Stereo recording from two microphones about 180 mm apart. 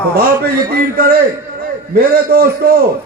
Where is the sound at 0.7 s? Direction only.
60° right (ahead or behind).